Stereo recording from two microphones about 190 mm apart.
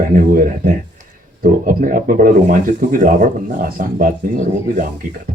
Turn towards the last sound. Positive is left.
turn(degrees=-45)  # may be behind; listen again after turning